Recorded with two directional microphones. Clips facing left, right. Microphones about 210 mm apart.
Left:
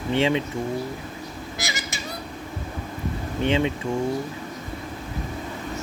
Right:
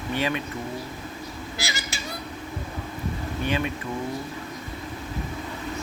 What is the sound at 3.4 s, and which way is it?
Speech, 25° left (ahead or behind).